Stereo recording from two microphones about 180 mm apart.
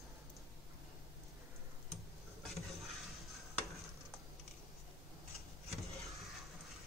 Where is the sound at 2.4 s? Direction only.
Centre (ahead or behind).